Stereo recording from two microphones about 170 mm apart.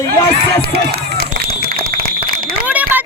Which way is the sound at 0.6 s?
70° right (ahead or behind).